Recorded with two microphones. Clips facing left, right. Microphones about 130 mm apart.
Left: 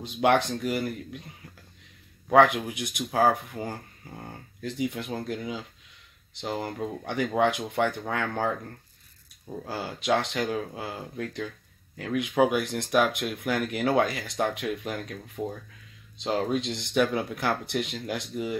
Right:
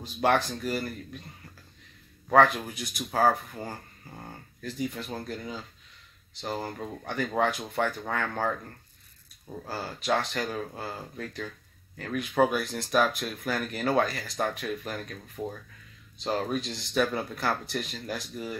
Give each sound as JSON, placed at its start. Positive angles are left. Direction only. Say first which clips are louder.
{"t": 0.0, "sound": "speech", "louder": "left 2 dB", "side_deg": 20}
{"t": 2.2, "sound": "speech", "louder": "left 2 dB", "side_deg": 15}
{"t": 4.6, "sound": "speech", "louder": "left 3 dB", "side_deg": 20}